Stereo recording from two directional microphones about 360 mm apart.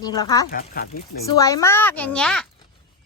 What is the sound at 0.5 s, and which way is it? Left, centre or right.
Speech, left.